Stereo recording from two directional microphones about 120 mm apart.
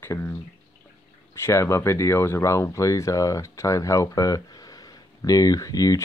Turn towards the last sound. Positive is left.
turn(degrees=30)  # may be behind; listen again after turning